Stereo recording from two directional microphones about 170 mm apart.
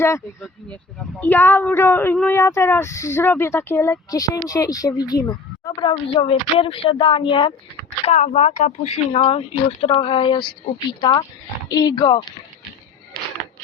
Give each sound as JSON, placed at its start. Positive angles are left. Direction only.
{"t": 1.2, "sound": "speech", "side_deg": 10}
{"t": 8.0, "sound": "speech", "side_deg": 40}